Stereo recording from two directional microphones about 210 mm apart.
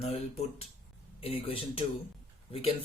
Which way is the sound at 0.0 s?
30° left (ahead or behind).